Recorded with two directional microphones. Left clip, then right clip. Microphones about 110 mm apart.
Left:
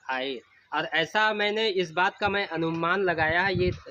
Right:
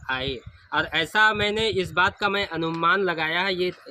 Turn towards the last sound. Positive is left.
turn(degrees=-25)  # may be behind; listen again after turning